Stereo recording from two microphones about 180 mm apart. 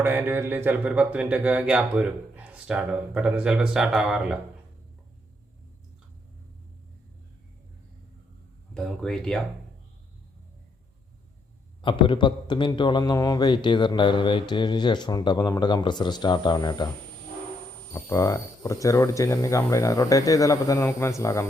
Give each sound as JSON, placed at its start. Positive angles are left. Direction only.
{"t": 0.0, "sound": "speech", "side_deg": -10}
{"t": 8.7, "sound": "speech", "side_deg": 5}
{"t": 11.8, "sound": "a man's voice", "side_deg": 25}
{"t": 17.9, "sound": "speech", "side_deg": 20}